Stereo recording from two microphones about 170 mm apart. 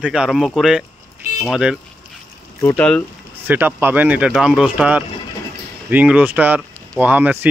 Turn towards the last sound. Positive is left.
turn(degrees=-10)  # may be behind; listen again after turning